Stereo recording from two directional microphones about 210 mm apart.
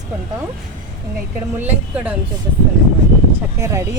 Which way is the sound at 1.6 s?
10° right (ahead or behind).